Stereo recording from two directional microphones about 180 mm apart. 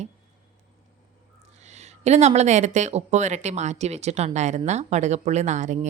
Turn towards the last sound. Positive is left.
turn(degrees=-40)  # may be behind; listen again after turning